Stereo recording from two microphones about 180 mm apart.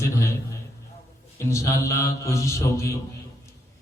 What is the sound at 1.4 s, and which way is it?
A man's voice, 15° left (ahead or behind).